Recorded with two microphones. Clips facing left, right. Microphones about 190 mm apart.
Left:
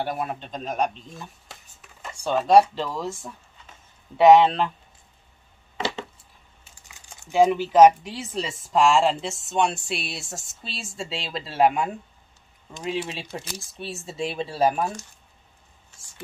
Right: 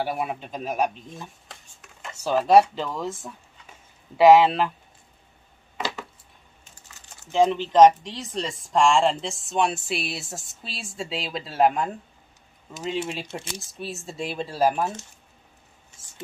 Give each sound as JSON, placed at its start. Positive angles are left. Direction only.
{"t": 0.0, "sound": "speech", "side_deg": -5}
{"t": 6.6, "sound": "speech", "side_deg": 10}
{"t": 13.3, "sound": "speech", "side_deg": -25}
{"t": 13.7, "sound": "speech", "side_deg": 0}